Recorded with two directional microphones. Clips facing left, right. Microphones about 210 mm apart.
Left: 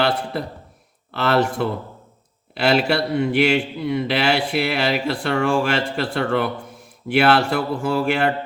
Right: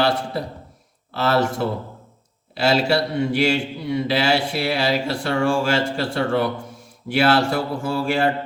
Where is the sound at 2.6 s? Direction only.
55° left (ahead or behind).